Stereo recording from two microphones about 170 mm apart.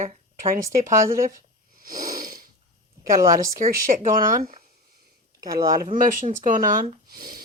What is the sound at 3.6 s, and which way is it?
Speech, 50° right (ahead or behind).